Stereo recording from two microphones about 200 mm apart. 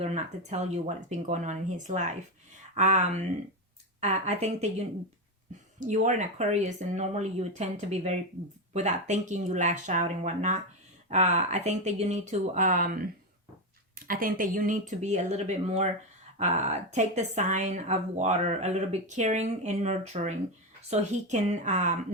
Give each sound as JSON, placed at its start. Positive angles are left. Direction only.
{"t": 0.0, "sound": "speech", "side_deg": -35}
{"t": 5.8, "sound": "speech", "side_deg": -40}